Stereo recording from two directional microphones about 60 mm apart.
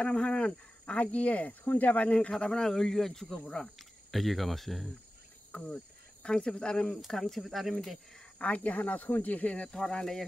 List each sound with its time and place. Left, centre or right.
0.0 s speech: centre
3.7 s speech: centre
5.5 s speech: centre
8.4 s speech: left
9.7 s speech: centre